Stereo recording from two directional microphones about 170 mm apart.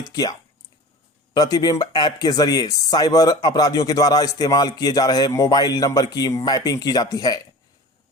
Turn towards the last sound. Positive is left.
turn(degrees=20)  # may be behind; listen again after turning